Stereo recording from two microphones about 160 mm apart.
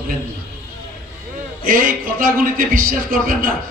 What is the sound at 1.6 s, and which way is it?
A man's voice, 60° right (ahead or behind).